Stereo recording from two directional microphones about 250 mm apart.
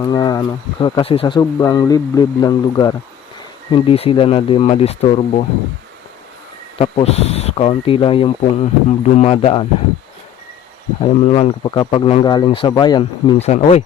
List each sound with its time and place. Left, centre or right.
0.0 s speech: centre
6.7 s speech: left
11.0 s speech: left